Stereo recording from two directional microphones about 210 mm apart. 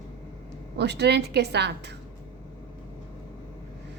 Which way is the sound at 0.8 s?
50° right (ahead or behind).